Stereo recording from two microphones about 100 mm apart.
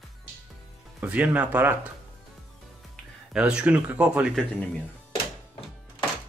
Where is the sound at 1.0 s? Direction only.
15° right (ahead or behind).